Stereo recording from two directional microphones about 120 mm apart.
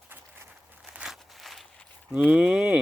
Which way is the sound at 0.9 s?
5° right (ahead or behind).